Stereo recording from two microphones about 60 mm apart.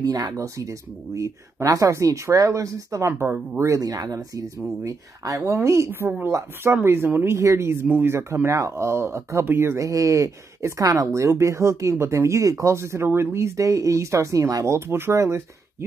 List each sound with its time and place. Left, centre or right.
0.0 s speech: right
4.8 s speech: right
5.9 s speech: right
7.3 s speech: right
9.8 s speech: right
14.9 s speech: right
15.1 s speech: right